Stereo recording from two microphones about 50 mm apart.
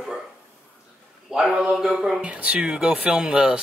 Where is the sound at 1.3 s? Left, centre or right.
Centre.